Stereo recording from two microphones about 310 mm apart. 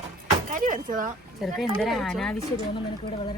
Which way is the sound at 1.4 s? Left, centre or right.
Centre.